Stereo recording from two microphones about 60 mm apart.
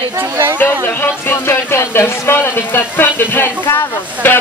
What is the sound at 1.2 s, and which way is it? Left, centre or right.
Speech, left.